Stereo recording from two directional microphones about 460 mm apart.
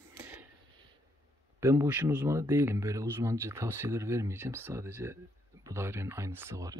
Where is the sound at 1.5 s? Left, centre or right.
Centre.